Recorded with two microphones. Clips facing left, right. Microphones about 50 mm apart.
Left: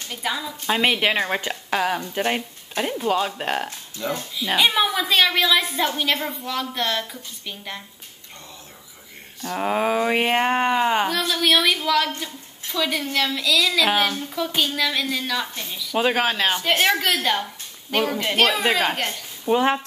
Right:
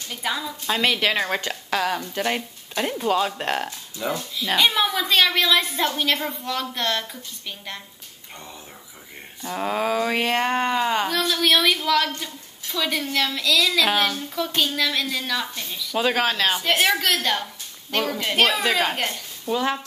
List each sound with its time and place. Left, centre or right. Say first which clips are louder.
0.1 s a woman's voice: even; centre
0.7 s a woman's voice: left 1 dB; centre
4.0 s speech: even; centre
4.4 s a woman's voice: left 1 dB; centre
9.6 s a woman's voice: left 2 dB; centre
11.1 s a woman's voice: even; centre
19.4 s speech: left 4 dB; left